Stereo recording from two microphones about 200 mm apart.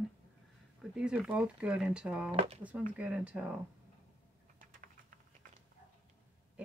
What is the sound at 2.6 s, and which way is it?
Speech, 5° right (ahead or behind).